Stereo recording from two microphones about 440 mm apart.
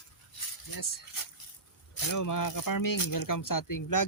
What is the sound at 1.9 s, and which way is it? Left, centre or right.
Speech, left.